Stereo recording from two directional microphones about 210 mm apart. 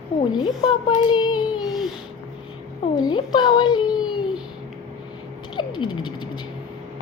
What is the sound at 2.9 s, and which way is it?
Speech, 20° left (ahead or behind).